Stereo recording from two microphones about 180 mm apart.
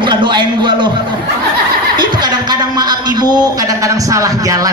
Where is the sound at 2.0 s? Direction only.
25° right (ahead or behind).